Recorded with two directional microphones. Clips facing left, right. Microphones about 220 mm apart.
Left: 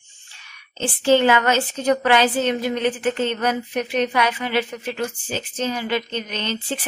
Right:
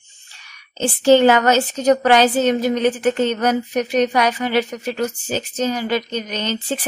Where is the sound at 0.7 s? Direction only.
40° right (ahead or behind).